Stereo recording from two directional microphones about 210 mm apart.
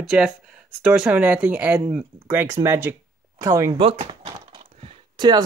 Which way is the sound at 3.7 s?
25° right (ahead or behind).